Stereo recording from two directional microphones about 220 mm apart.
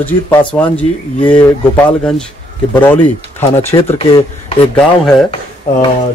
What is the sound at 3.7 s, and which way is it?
Speech, 25° left (ahead or behind).